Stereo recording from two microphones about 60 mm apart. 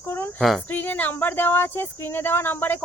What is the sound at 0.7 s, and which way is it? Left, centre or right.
Speech, left.